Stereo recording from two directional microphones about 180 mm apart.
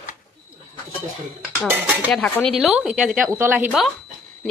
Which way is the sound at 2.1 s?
Centre (ahead or behind).